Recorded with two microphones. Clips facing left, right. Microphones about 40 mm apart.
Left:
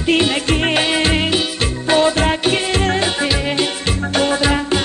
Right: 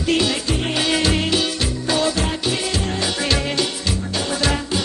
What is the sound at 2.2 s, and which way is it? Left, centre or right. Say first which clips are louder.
Music: left 6 dB; left.